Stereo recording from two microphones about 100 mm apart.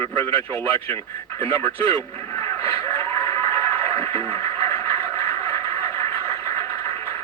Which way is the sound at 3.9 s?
20° left (ahead or behind).